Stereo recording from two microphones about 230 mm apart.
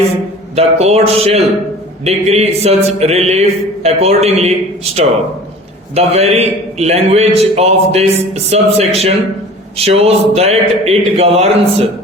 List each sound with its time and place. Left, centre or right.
0.5 s a man's voice: right
5.9 s a man's voice: right